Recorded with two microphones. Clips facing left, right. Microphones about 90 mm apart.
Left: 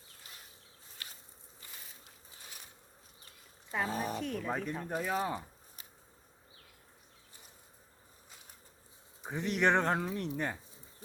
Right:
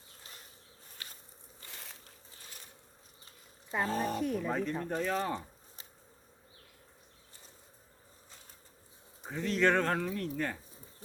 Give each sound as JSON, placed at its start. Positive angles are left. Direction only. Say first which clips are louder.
{"t": 1.7, "sound": "a sound", "louder": "right 4 dB", "side_deg": -70}
{"t": 3.8, "sound": "speech", "louder": "right 4 dB", "side_deg": 10}
{"t": 4.2, "sound": "speech", "louder": "right 4 dB", "side_deg": -10}
{"t": 4.4, "sound": "speech", "louder": "right 3 dB", "side_deg": 5}
{"t": 9.2, "sound": "speech", "louder": "right 1 dB", "side_deg": 15}